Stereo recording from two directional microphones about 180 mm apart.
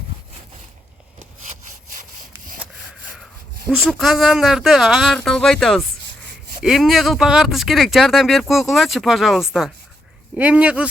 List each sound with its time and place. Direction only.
3.7 s speech: 5° right (ahead or behind)
6.0 s rub: 80° right
6.6 s speech: centre (ahead or behind)